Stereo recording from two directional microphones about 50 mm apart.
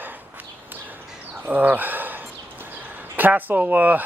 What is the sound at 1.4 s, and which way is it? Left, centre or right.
Speech, right.